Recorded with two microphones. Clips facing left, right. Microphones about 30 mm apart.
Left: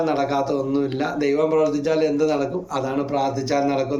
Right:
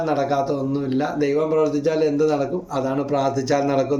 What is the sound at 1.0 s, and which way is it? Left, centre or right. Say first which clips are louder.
A man's voice: right 2 dB; left.